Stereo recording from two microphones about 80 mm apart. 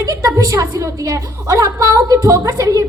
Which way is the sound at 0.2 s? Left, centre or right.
Right.